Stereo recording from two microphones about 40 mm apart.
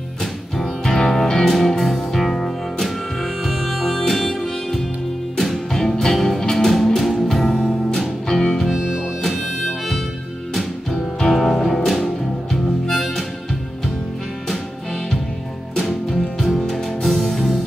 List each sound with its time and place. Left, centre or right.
0.2 s music: centre
7.4 s music: centre
10.5 s music: centre
16.1 s music: centre